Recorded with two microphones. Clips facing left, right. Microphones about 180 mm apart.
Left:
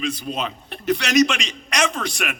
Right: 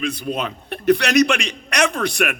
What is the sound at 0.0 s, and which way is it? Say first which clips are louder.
A man's voice: right 2 dB; 60° right (ahead or behind).